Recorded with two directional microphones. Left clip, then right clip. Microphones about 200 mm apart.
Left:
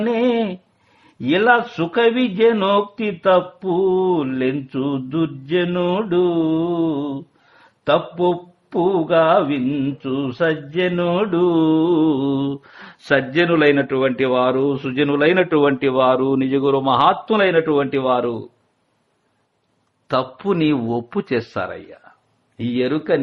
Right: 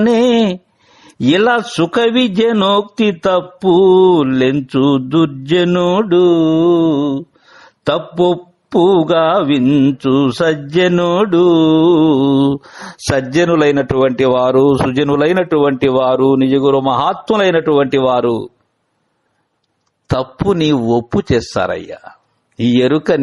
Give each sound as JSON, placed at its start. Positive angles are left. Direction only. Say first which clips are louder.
{"t": 0.0, "sound": "a sound", "louder": "right 7 dB", "side_deg": -45}
{"t": 1.2, "sound": "speech", "louder": "right 3 dB", "side_deg": -45}
{"t": 7.9, "sound": "mantra", "louder": "right 3 dB", "side_deg": -45}
{"t": 20.1, "sound": "mantra", "louder": "right 4 dB", "side_deg": -35}